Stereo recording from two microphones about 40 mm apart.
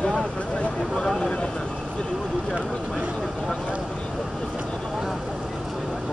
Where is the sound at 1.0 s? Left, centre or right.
Centre.